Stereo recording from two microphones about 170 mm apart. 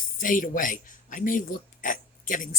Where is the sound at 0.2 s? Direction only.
50° left (ahead or behind).